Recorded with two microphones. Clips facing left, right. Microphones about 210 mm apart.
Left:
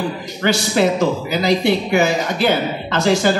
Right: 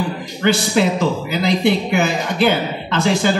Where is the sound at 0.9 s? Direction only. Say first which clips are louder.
Left 1 dB; 55° right (ahead or behind).